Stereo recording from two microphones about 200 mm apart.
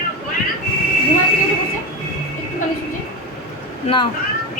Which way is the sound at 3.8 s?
25° left (ahead or behind).